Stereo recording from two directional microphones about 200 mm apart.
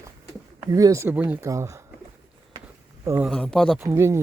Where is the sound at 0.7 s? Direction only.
15° right (ahead or behind).